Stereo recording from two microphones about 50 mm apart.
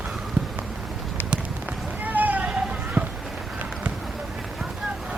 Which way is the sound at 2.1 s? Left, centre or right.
Right.